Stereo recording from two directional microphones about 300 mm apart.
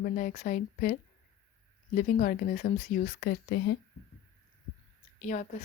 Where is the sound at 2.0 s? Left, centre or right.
Left.